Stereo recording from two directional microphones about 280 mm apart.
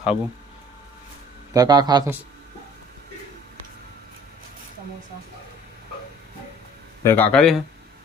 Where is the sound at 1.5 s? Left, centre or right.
Centre.